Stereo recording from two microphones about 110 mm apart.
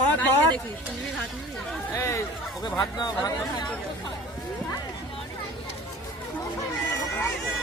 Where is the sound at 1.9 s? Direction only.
25° left (ahead or behind).